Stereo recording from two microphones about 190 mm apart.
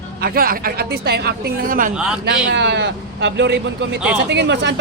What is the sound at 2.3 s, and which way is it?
A man's voice, 65° right (ahead or behind).